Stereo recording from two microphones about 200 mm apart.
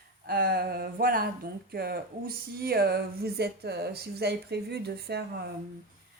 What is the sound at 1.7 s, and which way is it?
Speech, 50° right (ahead or behind).